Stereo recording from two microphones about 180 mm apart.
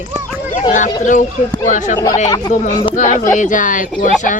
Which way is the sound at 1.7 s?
45° left (ahead or behind).